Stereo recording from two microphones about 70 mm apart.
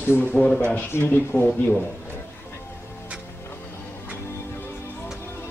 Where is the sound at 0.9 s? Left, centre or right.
Left.